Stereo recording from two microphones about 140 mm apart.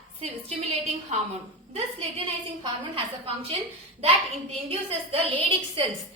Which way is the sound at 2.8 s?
45° right (ahead or behind).